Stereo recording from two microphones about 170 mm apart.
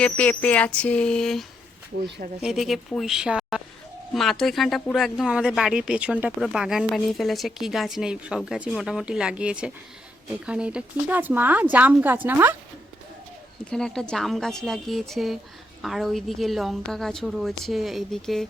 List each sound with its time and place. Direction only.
0.0 s a sound: 10° left (ahead or behind)
2.0 s speech: 75° right (ahead or behind)
2.4 s speech: centre (ahead or behind)
13.7 s speech: 5° left (ahead or behind)